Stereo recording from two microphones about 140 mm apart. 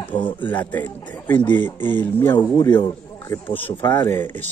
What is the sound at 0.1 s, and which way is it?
Speech, 35° left (ahead or behind).